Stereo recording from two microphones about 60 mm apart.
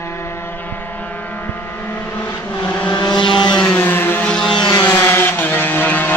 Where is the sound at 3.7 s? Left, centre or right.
Left.